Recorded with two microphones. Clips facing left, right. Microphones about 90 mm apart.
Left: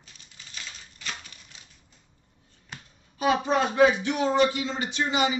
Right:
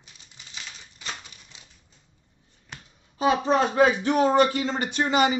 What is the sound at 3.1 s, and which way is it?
Speech, 30° right (ahead or behind).